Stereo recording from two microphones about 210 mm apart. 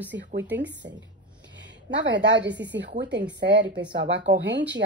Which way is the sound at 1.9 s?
55° right (ahead or behind).